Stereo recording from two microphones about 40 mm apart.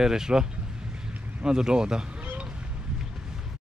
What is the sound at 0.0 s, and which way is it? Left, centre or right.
Speech, centre.